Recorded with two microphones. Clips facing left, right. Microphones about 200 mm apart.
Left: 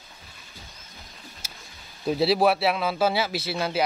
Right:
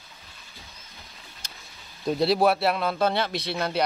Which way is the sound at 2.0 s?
Centre (ahead or behind).